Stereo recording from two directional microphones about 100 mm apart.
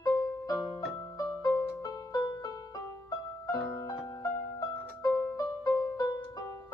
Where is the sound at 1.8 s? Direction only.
35° left (ahead or behind).